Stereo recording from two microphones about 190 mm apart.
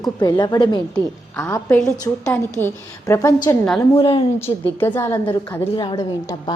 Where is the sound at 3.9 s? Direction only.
30° left (ahead or behind).